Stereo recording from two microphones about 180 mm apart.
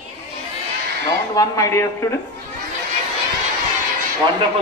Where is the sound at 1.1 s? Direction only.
20° left (ahead or behind).